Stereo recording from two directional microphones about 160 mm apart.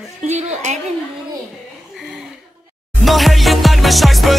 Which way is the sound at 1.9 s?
Centre (ahead or behind).